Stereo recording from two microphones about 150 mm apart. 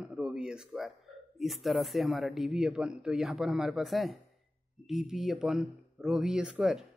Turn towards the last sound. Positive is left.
turn(degrees=-5)  # may be behind; listen again after turning